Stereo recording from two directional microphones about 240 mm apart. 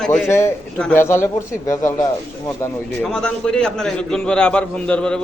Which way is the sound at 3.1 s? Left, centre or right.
Centre.